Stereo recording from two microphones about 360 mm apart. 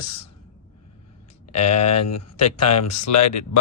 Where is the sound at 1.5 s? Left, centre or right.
Left.